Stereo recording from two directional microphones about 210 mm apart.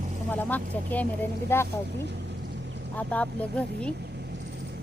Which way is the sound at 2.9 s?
5° left (ahead or behind).